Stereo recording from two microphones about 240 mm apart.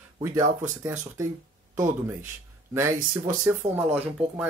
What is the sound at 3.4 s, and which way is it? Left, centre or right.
Speech, centre.